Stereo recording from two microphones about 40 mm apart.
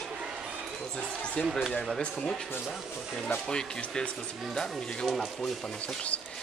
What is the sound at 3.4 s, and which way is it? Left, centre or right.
Speech, left.